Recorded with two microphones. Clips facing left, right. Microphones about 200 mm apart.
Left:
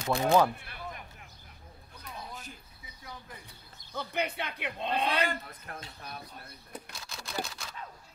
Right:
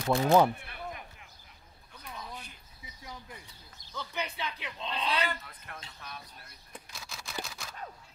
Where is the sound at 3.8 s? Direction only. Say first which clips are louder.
Left 4 dB; 55° left (ahead or behind); by 6.2 s 40° left (ahead or behind).